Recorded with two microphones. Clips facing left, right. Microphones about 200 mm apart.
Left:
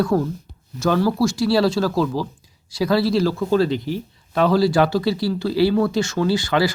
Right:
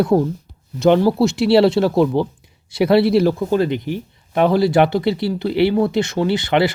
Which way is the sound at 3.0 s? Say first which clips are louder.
Right 4 dB; 60° right (ahead or behind).